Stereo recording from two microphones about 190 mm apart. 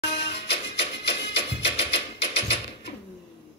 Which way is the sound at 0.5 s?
65° left (ahead or behind).